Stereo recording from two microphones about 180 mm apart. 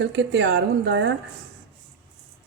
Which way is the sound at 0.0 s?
80° right.